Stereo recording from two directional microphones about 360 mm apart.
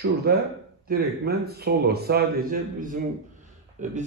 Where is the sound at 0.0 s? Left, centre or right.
Right.